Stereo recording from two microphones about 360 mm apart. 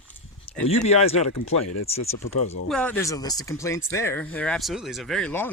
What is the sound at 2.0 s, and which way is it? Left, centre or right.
Speech, left.